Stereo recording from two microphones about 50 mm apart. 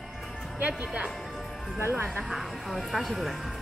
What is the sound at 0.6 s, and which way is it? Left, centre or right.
Speech, right.